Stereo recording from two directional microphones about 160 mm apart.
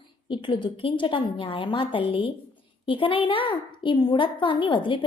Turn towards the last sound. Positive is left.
turn(degrees=30)  # may be behind; listen again after turning